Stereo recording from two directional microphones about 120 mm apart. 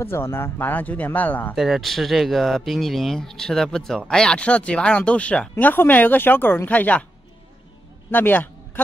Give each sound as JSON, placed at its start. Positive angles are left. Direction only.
{"t": 0.0, "sound": "speech", "side_deg": 20}
{"t": 1.5, "sound": "speech", "side_deg": 0}
{"t": 8.1, "sound": "a man's voice", "side_deg": 15}